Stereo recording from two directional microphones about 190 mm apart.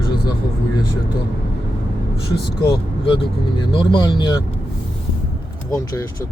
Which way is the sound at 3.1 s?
25° left (ahead or behind).